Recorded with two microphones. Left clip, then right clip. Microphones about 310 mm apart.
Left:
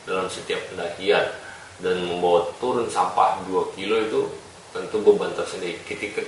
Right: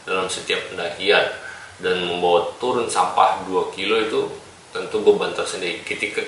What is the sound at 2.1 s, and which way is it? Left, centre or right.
Speech, left.